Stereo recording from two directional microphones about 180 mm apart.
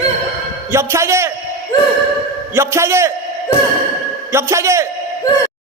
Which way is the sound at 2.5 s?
15° right (ahead or behind).